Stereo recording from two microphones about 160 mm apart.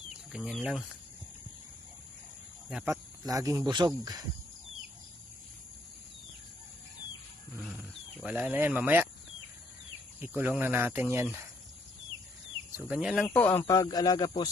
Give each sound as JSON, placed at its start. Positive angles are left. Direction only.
{"t": 0.1, "sound": "speech", "side_deg": -5}
{"t": 2.6, "sound": "speech", "side_deg": -5}
{"t": 2.9, "sound": "cricket", "side_deg": -20}
{"t": 7.6, "sound": "a sound", "side_deg": -5}
{"t": 10.2, "sound": "speech", "side_deg": -10}
{"t": 12.7, "sound": "speech", "side_deg": -5}
{"t": 13.2, "sound": "speech", "side_deg": 10}